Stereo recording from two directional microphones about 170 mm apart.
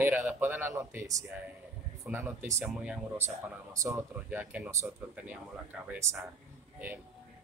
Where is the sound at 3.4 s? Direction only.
15° right (ahead or behind).